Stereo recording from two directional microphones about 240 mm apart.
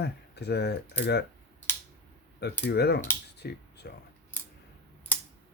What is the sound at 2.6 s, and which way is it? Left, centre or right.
Speech, left.